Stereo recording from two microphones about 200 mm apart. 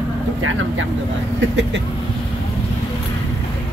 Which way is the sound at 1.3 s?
65° right (ahead or behind).